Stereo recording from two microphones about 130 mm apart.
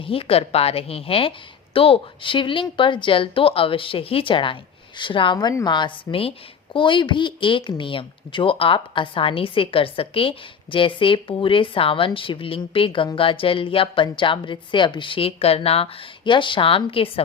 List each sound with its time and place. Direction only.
0.0 s a woman's voice: 45° left (ahead or behind)